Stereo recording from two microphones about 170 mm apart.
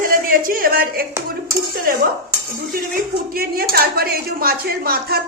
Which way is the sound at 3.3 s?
60° right (ahead or behind).